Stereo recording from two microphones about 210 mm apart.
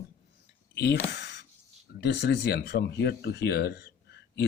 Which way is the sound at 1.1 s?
60° left (ahead or behind).